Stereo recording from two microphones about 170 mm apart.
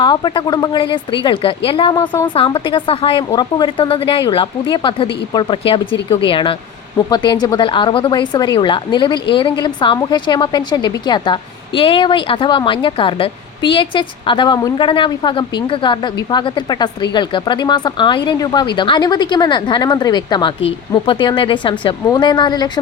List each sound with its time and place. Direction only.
0.0 s speech: 30° left (ahead or behind)